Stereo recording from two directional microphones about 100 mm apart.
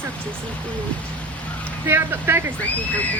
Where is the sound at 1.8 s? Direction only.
25° right (ahead or behind).